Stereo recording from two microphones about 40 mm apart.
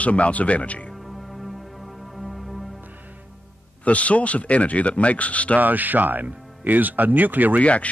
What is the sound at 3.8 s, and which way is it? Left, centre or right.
Speech, left.